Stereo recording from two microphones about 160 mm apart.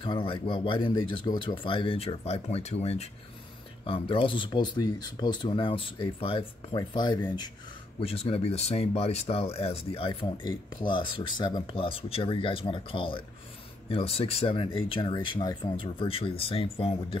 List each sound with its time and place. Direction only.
0.0 s speech: 35° left (ahead or behind)
8.0 s speech: 35° left (ahead or behind)